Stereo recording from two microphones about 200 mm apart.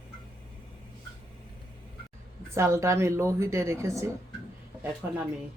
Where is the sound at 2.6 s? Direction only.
15° right (ahead or behind).